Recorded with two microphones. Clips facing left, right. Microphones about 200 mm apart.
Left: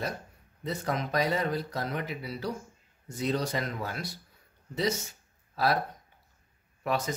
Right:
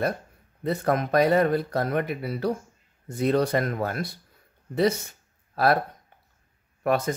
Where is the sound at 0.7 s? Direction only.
55° right (ahead or behind).